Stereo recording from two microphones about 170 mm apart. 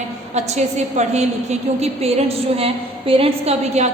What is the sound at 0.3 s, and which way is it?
A woman's voice, 40° right (ahead or behind).